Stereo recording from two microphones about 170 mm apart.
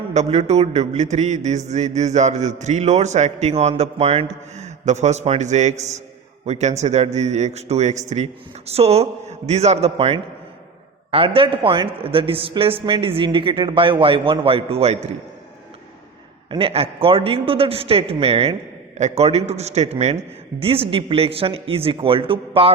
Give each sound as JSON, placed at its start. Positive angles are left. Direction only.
{"t": 0.1, "sound": "a man's voice", "side_deg": -40}
{"t": 11.3, "sound": "a man's voice", "side_deg": -30}
{"t": 16.5, "sound": "a man's voice", "side_deg": -30}